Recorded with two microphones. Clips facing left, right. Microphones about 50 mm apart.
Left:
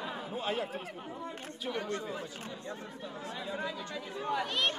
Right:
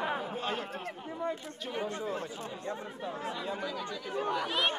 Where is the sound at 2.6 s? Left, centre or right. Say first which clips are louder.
Right 4 dB; right.